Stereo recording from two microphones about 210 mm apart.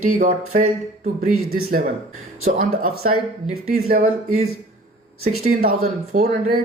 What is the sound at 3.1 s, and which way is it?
Speech, 90° right.